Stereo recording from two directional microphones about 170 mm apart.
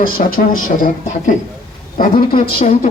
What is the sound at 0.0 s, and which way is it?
Speech, 55° left (ahead or behind).